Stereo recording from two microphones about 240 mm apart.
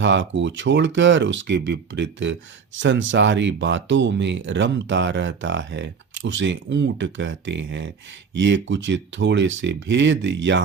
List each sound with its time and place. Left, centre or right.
0.0 s speech: right